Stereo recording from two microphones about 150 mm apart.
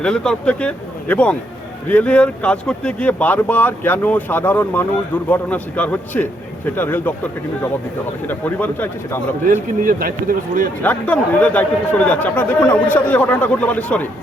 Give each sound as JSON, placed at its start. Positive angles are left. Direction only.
{"t": 0.0, "sound": "speech", "side_deg": 5}
{"t": 8.3, "sound": "speech", "side_deg": 10}
{"t": 9.5, "sound": "a man's voice", "side_deg": -65}
{"t": 10.8, "sound": "speech", "side_deg": 10}